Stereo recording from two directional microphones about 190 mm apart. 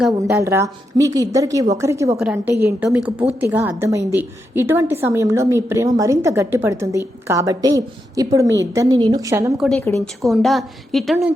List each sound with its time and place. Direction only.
0.2 s a woman's voice: 15° right (ahead or behind)
9.6 s a woman's voice: 5° left (ahead or behind)